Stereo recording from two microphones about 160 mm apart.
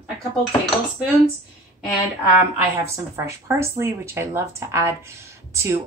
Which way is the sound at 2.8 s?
15° right (ahead or behind).